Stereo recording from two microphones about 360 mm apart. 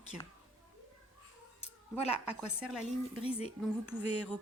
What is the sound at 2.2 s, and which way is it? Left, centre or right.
Speech, centre.